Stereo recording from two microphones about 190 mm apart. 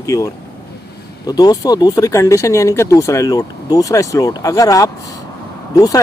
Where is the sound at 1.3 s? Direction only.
20° left (ahead or behind).